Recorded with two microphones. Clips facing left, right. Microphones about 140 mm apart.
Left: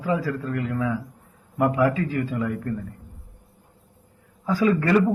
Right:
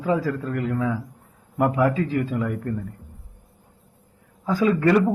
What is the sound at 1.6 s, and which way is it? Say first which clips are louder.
Speech: even; 20° right (ahead or behind).